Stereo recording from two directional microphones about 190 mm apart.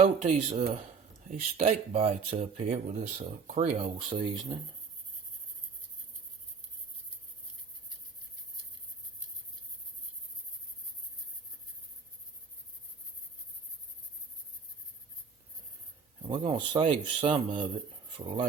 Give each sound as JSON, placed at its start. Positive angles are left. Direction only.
{"t": 0.0, "sound": "speech", "side_deg": -35}
{"t": 16.2, "sound": "speech", "side_deg": -30}